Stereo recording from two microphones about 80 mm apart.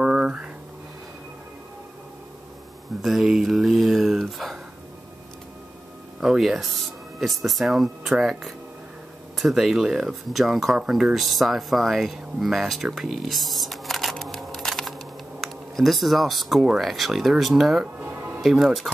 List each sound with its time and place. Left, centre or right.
0.0 s a sound: centre
3.0 s speech: centre
6.2 s speech: centre
18.0 s music: right
18.4 s speech: centre